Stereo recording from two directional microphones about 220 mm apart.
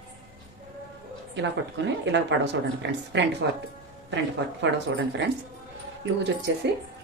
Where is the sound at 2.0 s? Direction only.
55° right (ahead or behind).